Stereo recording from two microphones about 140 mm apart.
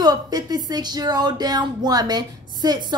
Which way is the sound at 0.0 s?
30° right (ahead or behind).